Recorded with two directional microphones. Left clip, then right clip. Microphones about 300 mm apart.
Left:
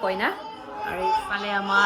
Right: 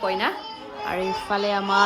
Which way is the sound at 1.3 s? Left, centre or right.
Centre.